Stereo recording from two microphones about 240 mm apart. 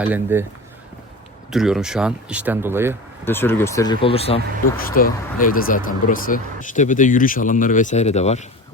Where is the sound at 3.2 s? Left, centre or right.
Centre.